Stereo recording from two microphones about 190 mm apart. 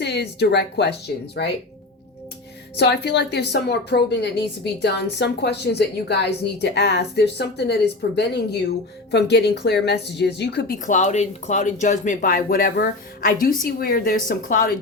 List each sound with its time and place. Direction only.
0.0 s a woman's voice: 60° left (ahead or behind)
2.7 s a woman's voice: 60° left (ahead or behind)
10.8 s speech: 40° left (ahead or behind)